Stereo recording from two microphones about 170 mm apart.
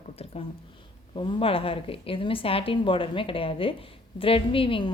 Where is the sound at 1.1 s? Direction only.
30° left (ahead or behind).